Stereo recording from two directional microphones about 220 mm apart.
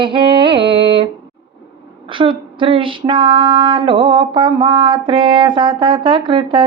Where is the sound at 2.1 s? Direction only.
25° right (ahead or behind).